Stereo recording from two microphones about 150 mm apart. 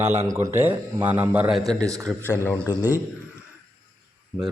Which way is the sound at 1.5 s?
Centre (ahead or behind).